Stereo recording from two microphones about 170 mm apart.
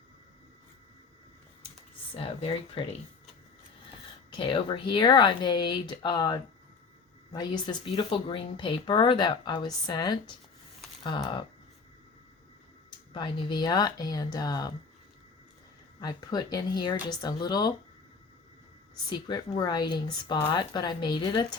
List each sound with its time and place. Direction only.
2.1 s speech: 35° left (ahead or behind)
4.4 s speech: 30° left (ahead or behind)
13.1 s speech: 25° left (ahead or behind)
16.0 s speech: 25° left (ahead or behind)
19.1 s speech: 25° left (ahead or behind)